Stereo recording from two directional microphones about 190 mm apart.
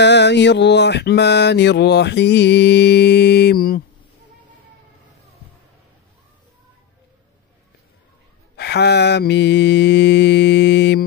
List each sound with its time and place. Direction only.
0.0 s mantra: 65° left (ahead or behind)
8.5 s mantra: 60° left (ahead or behind)